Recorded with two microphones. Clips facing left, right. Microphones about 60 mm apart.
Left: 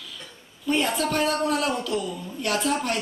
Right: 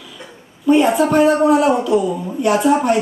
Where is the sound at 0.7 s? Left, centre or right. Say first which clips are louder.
Right 11 dB; right.